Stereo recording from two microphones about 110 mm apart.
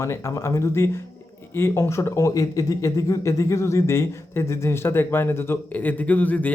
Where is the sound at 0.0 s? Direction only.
25° left (ahead or behind).